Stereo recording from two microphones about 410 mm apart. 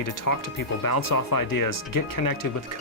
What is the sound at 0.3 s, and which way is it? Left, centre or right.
Speech, left.